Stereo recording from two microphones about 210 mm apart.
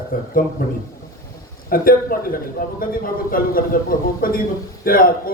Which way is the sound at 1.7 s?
45° left (ahead or behind).